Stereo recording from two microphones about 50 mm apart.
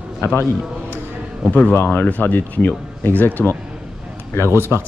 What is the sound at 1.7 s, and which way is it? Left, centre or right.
Speech, left.